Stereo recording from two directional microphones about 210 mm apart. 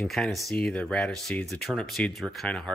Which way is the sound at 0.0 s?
Centre (ahead or behind).